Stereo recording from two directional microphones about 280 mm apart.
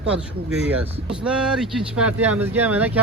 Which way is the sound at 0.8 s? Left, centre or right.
Centre.